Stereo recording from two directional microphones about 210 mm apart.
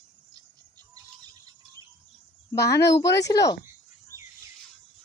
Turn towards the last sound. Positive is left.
turn(degrees=15)  # may be behind; listen again after turning